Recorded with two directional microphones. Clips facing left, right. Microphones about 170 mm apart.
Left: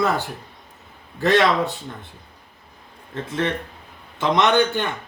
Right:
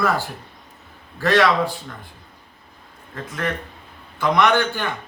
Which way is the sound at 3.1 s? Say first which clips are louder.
Left 3 dB; 25° left (ahead or behind).